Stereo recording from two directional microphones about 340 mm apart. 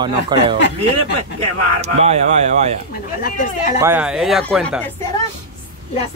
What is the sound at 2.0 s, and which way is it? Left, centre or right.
Speech, centre.